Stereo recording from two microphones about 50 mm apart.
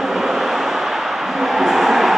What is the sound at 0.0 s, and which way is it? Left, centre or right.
Vehicle, centre.